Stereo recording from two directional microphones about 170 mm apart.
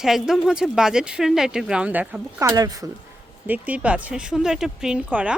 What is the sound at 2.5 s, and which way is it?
Speech, 20° right (ahead or behind).